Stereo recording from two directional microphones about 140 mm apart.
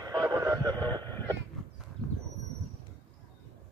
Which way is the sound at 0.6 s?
15° left (ahead or behind).